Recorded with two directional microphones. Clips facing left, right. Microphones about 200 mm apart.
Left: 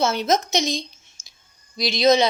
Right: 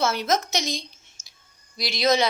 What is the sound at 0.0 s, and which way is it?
A woman's voice, 20° left (ahead or behind).